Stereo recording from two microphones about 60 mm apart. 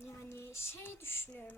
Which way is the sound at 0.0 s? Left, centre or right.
Left.